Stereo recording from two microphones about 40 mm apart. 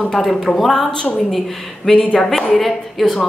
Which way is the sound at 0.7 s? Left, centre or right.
Centre.